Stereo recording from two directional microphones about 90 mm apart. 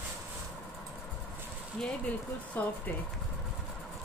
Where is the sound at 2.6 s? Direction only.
20° left (ahead or behind).